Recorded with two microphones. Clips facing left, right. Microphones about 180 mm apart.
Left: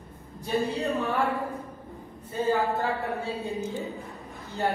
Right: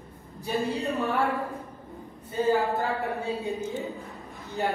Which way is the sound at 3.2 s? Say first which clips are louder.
Right 2 dB; 15° right (ahead or behind).